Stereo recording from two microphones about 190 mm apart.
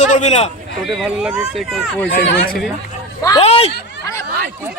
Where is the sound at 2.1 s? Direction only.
55° left (ahead or behind).